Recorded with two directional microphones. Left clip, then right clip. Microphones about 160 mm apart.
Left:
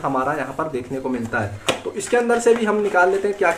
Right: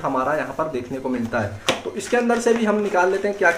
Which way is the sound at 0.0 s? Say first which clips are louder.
Even; 15° left (ahead or behind).